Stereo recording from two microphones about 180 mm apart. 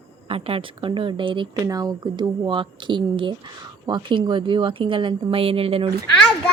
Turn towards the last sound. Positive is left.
turn(degrees=5)  # may be behind; listen again after turning